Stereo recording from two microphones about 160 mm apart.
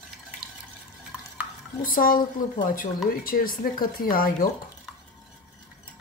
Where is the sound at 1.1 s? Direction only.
5° right (ahead or behind).